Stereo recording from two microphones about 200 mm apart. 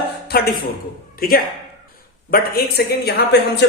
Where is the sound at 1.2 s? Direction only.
45° left (ahead or behind).